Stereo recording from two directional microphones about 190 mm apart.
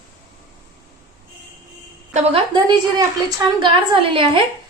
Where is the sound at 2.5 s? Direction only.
25° right (ahead or behind).